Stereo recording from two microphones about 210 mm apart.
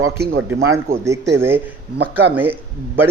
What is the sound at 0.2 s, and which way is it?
Speech, 70° right (ahead or behind).